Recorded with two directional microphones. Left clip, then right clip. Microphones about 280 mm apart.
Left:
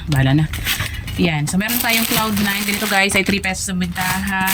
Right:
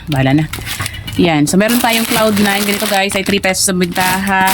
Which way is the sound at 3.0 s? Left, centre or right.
Centre.